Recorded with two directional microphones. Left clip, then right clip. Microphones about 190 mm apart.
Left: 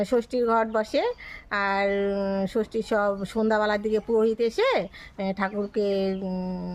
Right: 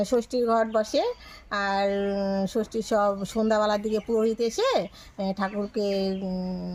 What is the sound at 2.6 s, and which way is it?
Speech, 30° left (ahead or behind).